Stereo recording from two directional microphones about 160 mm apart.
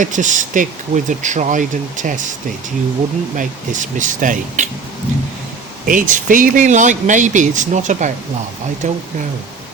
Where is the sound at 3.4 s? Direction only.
50° right (ahead or behind).